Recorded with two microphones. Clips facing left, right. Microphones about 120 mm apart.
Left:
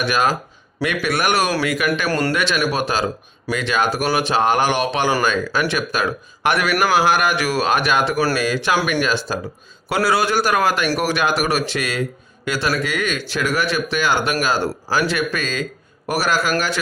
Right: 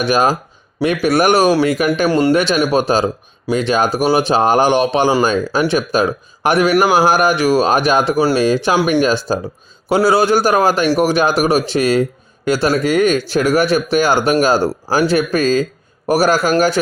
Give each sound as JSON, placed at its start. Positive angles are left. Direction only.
{"t": 0.0, "sound": "speech", "side_deg": -35}
{"t": 2.0, "sound": "speech", "side_deg": -20}
{"t": 2.3, "sound": "speech", "side_deg": -35}
{"t": 8.2, "sound": "speech", "side_deg": -25}